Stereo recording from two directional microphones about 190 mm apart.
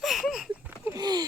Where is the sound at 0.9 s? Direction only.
20° right (ahead or behind).